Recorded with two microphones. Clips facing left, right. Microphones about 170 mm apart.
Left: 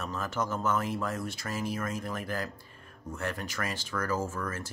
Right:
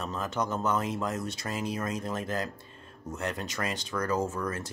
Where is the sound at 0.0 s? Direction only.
20° right (ahead or behind).